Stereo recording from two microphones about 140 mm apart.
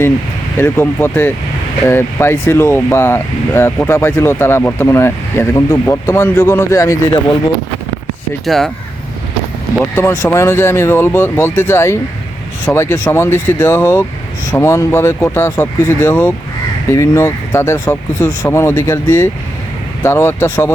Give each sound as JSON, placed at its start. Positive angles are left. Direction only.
{"t": 0.6, "sound": "speech", "side_deg": 15}
{"t": 8.4, "sound": "speech", "side_deg": 0}
{"t": 9.7, "sound": "speech", "side_deg": 10}